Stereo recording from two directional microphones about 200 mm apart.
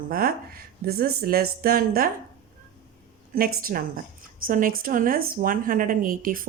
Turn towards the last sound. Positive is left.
turn(degrees=-45)  # may be behind; listen again after turning